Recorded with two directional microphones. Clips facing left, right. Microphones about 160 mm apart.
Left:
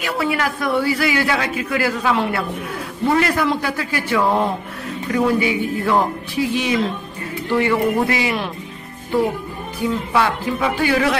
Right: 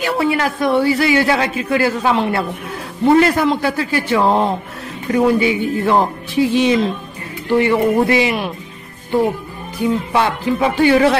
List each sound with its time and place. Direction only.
0.0 s a man's voice: 25° right (ahead or behind)
9.8 s a man's voice: 20° right (ahead or behind)